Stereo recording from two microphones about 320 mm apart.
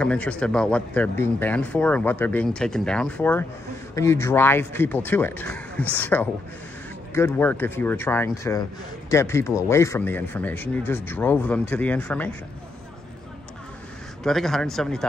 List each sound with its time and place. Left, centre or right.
0.0 s speech: centre
14.2 s speech: centre